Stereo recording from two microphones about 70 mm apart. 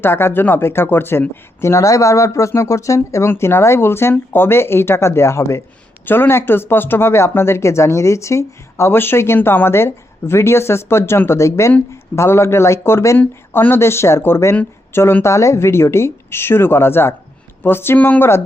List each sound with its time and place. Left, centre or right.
0.0 s speech: left
6.1 s speech: left
17.9 s speech: left